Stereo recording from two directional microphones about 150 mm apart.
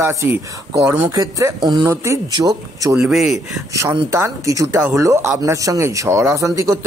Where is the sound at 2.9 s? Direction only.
5° right (ahead or behind).